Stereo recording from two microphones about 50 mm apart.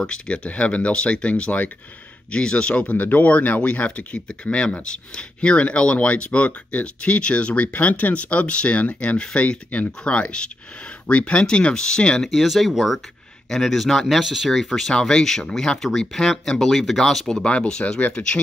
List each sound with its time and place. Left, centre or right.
0.0 s speech: centre
12.3 s speech: centre
14.0 s speech: centre
17.3 s speech: left